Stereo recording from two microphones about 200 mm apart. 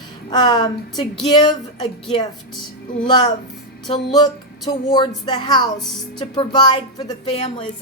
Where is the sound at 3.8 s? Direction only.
20° left (ahead or behind).